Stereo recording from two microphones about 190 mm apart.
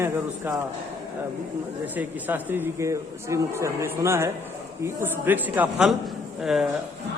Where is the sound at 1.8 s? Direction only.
10° right (ahead or behind).